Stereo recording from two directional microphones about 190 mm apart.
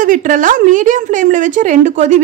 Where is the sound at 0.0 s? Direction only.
45° right (ahead or behind).